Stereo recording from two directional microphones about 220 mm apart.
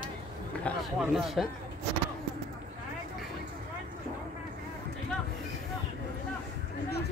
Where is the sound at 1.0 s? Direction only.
Centre (ahead or behind).